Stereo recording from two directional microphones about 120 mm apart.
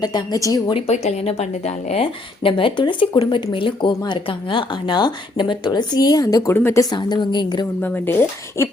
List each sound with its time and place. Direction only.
0.0 s speech: 35° left (ahead or behind)
0.7 s a woman's voice: 65° left (ahead or behind); by 6.8 s 20° left (ahead or behind)
6.9 s speech: 40° left (ahead or behind)
7.8 s speech: 15° left (ahead or behind)